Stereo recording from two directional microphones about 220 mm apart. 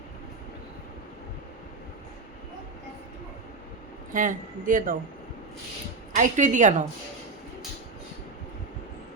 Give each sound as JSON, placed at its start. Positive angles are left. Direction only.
{"t": 4.1, "sound": "speech", "side_deg": -35}
{"t": 6.1, "sound": "speech", "side_deg": -35}